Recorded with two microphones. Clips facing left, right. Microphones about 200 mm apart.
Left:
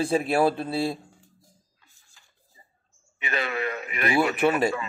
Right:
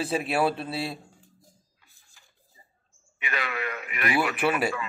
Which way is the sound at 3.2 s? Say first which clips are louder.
Left 4 dB; 30° left (ahead or behind).